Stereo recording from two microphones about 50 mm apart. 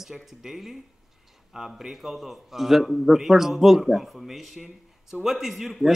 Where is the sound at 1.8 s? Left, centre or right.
Centre.